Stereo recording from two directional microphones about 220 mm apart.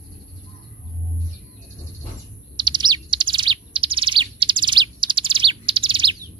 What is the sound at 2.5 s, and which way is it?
Bird, 20° right (ahead or behind).